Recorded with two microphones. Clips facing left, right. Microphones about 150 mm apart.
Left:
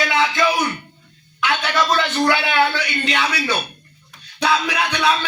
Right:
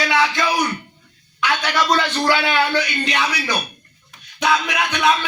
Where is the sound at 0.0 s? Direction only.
25° left (ahead or behind).